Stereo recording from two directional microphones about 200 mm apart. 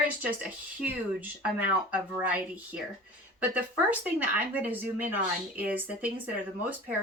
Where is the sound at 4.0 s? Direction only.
10° right (ahead or behind).